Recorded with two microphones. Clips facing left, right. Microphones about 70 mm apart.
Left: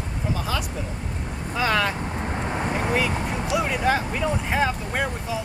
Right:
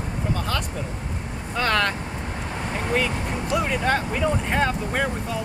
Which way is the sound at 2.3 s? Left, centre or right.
Left.